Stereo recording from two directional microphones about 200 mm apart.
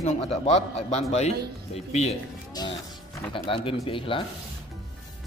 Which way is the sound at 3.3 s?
25° left (ahead or behind).